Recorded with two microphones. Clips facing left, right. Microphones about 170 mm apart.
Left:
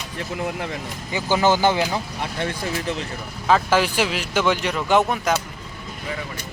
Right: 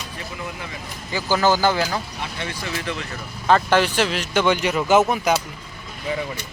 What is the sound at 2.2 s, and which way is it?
Speech, 50° left (ahead or behind).